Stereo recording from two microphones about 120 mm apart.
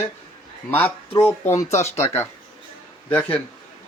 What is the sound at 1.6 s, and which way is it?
Speech, 65° left (ahead or behind).